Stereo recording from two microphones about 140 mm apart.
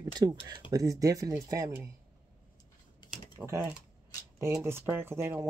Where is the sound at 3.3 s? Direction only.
20° right (ahead or behind).